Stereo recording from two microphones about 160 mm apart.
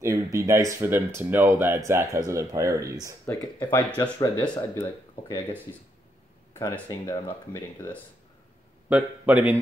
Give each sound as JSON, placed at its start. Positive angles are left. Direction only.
{"t": 0.0, "sound": "speech", "side_deg": -20}
{"t": 3.3, "sound": "speech", "side_deg": 25}
{"t": 3.7, "sound": "speech", "side_deg": 10}
{"t": 4.2, "sound": "speech", "side_deg": 25}
{"t": 6.9, "sound": "speech", "side_deg": 25}
{"t": 8.8, "sound": "a man's voice", "side_deg": -10}